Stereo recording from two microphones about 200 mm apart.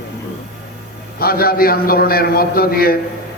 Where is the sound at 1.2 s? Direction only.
50° left (ahead or behind).